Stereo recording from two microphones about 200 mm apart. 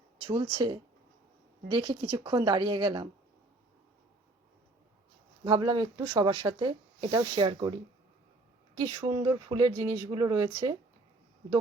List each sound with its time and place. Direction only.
0.2 s speech: 25° right (ahead or behind)
5.5 s speech: 20° right (ahead or behind)